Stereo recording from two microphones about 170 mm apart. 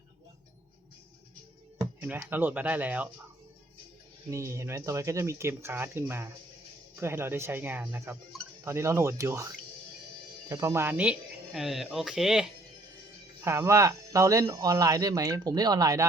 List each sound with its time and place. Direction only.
2.0 s speech: 10° right (ahead or behind)
4.3 s speech: 20° right (ahead or behind)
10.5 s speech: 15° right (ahead or behind)
13.4 s speech: 15° right (ahead or behind)